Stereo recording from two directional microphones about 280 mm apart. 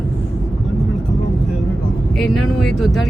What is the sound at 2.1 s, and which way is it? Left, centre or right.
Speech, centre.